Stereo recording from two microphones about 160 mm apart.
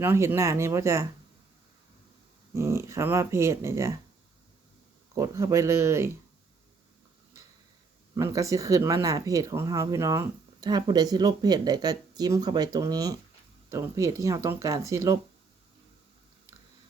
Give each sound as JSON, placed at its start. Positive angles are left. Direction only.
{"t": 0.0, "sound": "speech", "side_deg": -15}
{"t": 2.6, "sound": "speech", "side_deg": -15}
{"t": 5.1, "sound": "speech", "side_deg": -20}
{"t": 8.1, "sound": "speech", "side_deg": -20}